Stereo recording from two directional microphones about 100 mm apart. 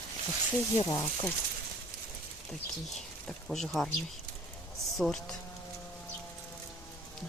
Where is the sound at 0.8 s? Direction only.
35° left (ahead or behind).